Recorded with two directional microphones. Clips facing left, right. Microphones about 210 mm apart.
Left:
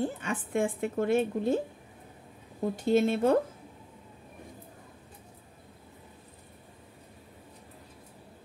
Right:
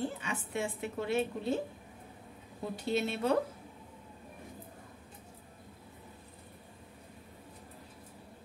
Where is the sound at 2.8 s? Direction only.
50° left (ahead or behind).